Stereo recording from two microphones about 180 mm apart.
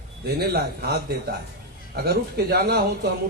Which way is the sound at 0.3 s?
60° right (ahead or behind).